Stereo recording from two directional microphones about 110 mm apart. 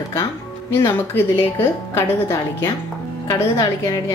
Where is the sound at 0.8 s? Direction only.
20° left (ahead or behind).